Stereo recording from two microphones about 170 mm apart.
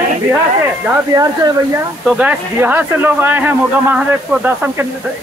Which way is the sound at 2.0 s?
5° right (ahead or behind).